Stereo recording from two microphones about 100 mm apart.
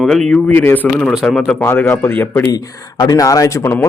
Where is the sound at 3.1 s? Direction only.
35° left (ahead or behind).